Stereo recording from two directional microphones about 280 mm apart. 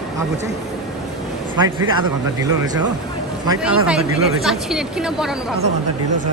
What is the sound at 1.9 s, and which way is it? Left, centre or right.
A woman's voice, centre.